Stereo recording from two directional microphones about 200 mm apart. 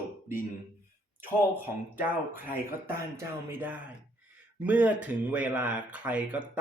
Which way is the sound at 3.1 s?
10° right (ahead or behind).